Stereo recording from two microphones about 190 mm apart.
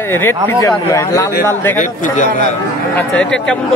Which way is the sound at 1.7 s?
40° left (ahead or behind).